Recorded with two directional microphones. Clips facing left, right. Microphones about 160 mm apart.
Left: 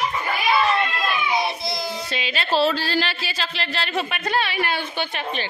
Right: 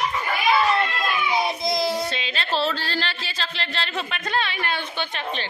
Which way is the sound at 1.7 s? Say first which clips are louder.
Right 5 dB; 25° right (ahead or behind).